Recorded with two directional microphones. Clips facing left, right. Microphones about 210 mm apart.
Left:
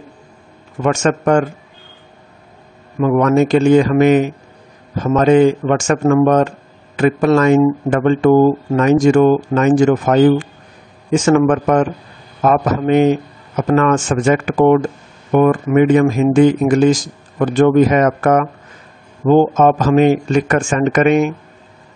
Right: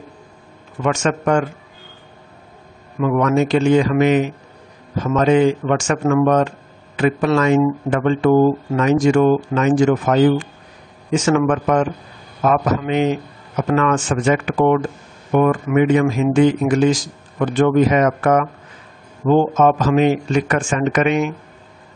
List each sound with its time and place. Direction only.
0.8 s speech: 45° left (ahead or behind)
3.0 s speech: 45° left (ahead or behind)